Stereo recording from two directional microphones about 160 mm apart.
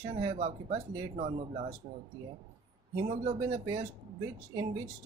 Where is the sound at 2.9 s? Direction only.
30° right (ahead or behind).